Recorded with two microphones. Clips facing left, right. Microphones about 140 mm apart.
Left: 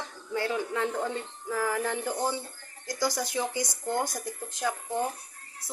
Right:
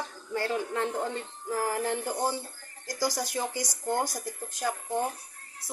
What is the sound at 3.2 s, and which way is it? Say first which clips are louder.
Speech: left 1 dB; 45° right (ahead or behind).